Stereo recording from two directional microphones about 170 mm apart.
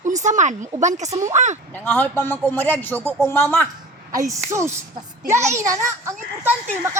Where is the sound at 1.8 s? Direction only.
10° left (ahead or behind).